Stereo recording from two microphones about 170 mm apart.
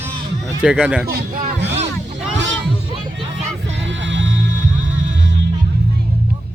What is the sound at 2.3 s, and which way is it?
Music, 90° right.